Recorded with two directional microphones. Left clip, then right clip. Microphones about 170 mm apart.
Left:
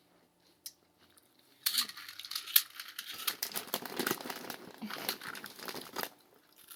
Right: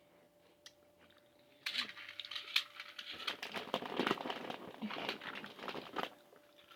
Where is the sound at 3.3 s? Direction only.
5° left (ahead or behind).